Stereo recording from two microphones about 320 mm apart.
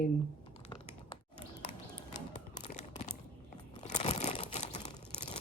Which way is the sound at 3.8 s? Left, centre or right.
Left.